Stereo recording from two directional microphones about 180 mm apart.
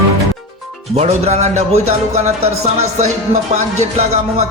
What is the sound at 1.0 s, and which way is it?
Speech, 40° right (ahead or behind).